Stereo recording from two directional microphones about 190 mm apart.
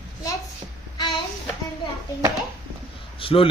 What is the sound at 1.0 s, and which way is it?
Child singing, 25° left (ahead or behind).